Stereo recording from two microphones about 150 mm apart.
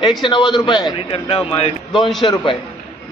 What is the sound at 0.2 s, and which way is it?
A man's voice, 35° left (ahead or behind).